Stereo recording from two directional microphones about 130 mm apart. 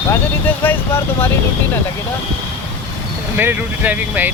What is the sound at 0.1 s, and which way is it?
Speech, 15° left (ahead or behind).